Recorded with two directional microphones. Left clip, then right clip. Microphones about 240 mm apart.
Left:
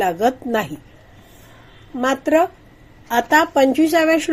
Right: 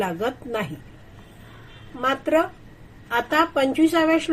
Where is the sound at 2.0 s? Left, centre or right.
Left.